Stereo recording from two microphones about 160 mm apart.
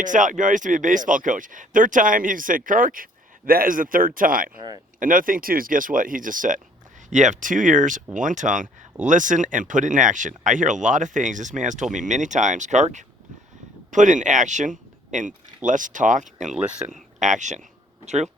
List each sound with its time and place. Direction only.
0.0 s speech: 55° right (ahead or behind)
16.5 s speech: 10° right (ahead or behind)
16.9 s speech: 50° right (ahead or behind)